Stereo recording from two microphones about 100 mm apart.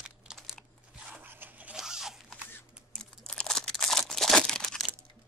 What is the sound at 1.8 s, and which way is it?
Zipper, 5° right (ahead or behind).